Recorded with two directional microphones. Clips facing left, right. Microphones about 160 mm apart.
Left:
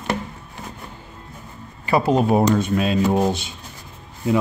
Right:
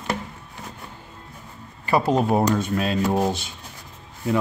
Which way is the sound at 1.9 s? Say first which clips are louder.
Left 2 dB; 20° left (ahead or behind).